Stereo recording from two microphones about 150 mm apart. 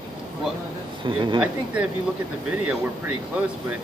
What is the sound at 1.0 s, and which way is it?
Speech, 35° right (ahead or behind).